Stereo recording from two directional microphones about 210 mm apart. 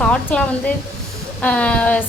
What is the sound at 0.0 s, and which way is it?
A woman's voice, 5° left (ahead or behind).